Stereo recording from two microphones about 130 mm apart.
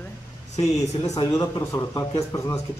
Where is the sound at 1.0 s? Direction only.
25° left (ahead or behind).